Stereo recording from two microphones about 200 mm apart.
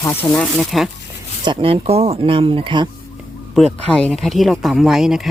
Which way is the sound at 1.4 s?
25° right (ahead or behind).